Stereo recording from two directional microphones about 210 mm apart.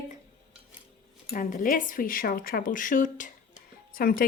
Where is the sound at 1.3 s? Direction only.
40° left (ahead or behind).